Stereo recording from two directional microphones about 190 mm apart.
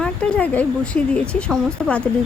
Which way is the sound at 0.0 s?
5° left (ahead or behind).